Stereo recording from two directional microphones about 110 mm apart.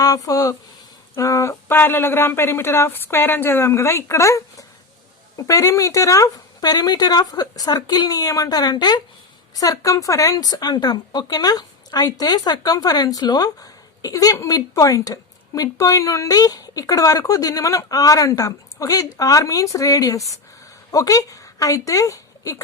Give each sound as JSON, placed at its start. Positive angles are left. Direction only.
{"t": 0.0, "sound": "a woman's voice", "side_deg": 30}